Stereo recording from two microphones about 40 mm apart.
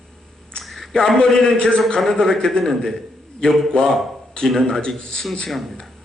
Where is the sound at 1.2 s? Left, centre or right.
Centre.